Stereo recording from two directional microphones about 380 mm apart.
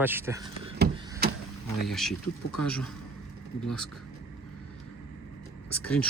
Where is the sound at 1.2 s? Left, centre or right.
Right.